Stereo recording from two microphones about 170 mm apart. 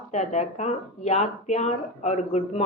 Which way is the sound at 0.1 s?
40° left (ahead or behind).